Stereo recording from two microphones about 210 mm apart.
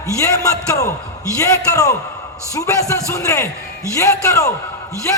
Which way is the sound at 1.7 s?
15° left (ahead or behind).